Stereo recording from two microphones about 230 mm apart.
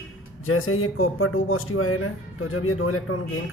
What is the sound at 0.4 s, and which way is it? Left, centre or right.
A man's voice, left.